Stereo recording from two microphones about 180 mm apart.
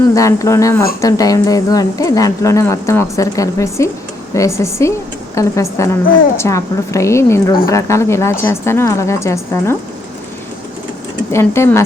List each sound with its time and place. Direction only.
0.1 s a woman's voice: 15° left (ahead or behind)
11.3 s a woman's voice: 15° left (ahead or behind)